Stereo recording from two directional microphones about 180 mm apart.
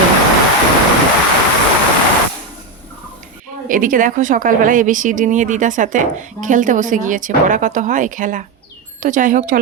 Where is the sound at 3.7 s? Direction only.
50° right (ahead or behind).